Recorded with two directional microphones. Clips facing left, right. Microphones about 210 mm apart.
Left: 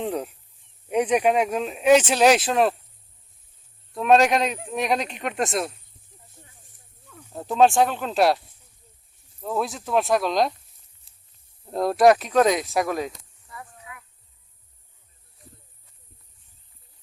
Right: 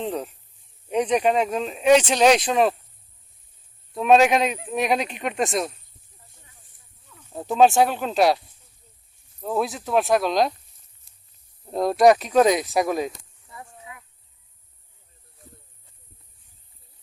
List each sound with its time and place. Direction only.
0.0 s speech: 10° left (ahead or behind)
3.9 s speech: centre (ahead or behind)
7.3 s speech: 5° right (ahead or behind)
9.4 s speech: 5° right (ahead or behind)
11.6 s speech: centre (ahead or behind)
12.7 s speech: 15° right (ahead or behind)